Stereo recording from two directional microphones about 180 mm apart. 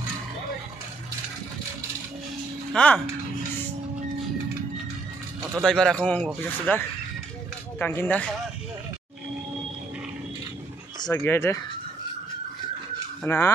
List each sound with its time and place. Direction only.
2.7 s speech: 5° left (ahead or behind)
5.6 s speech: 5° left (ahead or behind)
7.8 s speech: 10° left (ahead or behind)
11.0 s speech: 20° left (ahead or behind)
13.2 s speech: 15° left (ahead or behind)